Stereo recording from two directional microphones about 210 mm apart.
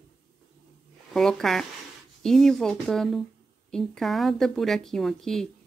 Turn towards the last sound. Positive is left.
turn(degrees=0)  # may be behind; listen again after turning